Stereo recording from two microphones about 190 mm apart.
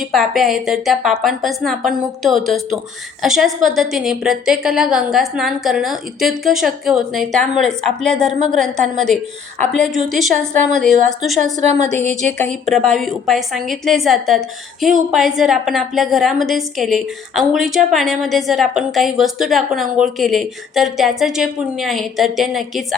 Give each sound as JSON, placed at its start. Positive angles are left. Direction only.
{"t": 0.1, "sound": "a woman's voice", "side_deg": 0}
{"t": 11.7, "sound": "a woman's voice", "side_deg": -35}
{"t": 12.4, "sound": "a woman's voice", "side_deg": 5}